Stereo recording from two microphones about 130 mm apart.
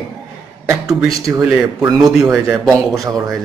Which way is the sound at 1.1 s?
25° right (ahead or behind).